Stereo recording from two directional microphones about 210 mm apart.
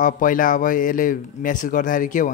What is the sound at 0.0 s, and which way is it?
Speech, 40° left (ahead or behind).